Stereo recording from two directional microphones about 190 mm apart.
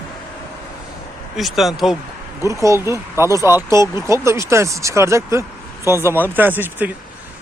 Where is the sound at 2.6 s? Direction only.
15° right (ahead or behind).